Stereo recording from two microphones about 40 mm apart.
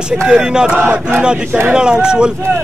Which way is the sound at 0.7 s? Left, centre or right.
Right.